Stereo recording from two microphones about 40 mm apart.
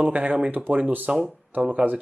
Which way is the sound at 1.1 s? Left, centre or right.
Right.